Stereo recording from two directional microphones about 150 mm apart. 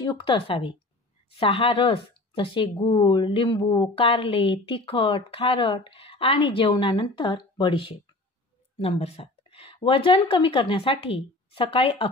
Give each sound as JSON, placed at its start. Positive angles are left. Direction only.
{"t": 0.0, "sound": "a woman's voice", "side_deg": 35}